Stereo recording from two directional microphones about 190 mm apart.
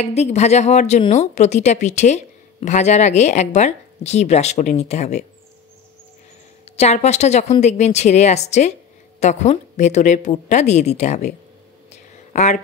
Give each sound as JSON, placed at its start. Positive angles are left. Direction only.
{"t": 0.0, "sound": "a woman's voice", "side_deg": 35}
{"t": 6.6, "sound": "a woman's voice", "side_deg": 35}
{"t": 11.9, "sound": "a sound", "side_deg": 40}